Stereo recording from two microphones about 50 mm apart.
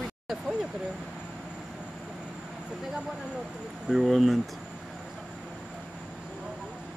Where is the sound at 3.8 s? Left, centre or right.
Centre.